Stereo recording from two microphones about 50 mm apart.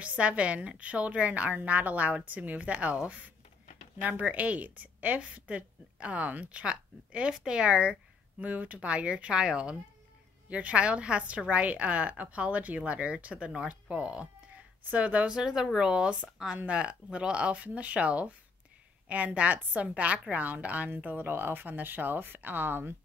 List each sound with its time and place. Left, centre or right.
0.0 s a woman's voice: right
8.5 s a woman's voice: right
8.7 s a woman's voice: right
15.2 s a woman's voice: centre; by 22.9 s right